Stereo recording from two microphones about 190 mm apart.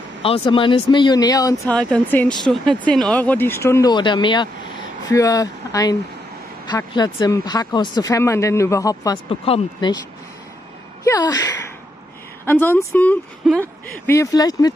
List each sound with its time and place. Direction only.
0.2 s speech: 30° left (ahead or behind)
1.7 s speech: 5° left (ahead or behind); by 9.9 s 25° left (ahead or behind)
11.1 s speech: 20° left (ahead or behind)